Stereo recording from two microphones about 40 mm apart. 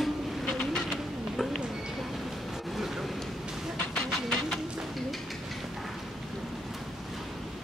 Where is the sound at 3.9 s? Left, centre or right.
Centre.